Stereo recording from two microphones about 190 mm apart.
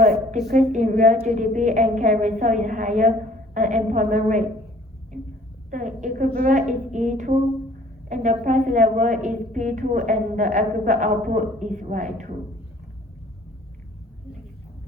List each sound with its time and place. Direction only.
0.5 s a woman's voice: 40° right (ahead or behind)
5.7 s a woman's voice: 40° right (ahead or behind)